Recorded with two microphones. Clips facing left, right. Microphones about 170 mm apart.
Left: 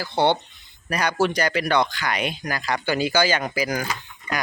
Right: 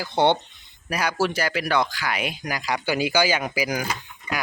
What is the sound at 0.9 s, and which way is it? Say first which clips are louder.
Speech: left 2 dB; 5° right (ahead or behind).